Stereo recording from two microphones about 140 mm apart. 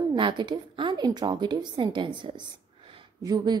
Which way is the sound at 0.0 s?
35° right (ahead or behind).